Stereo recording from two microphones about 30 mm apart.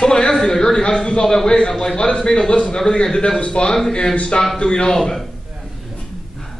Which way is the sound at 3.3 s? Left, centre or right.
Left.